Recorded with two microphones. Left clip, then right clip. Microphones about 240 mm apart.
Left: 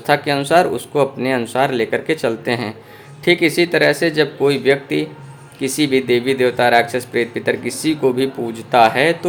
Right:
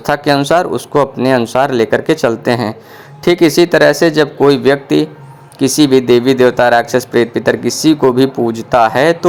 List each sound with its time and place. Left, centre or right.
0.0 s speech: right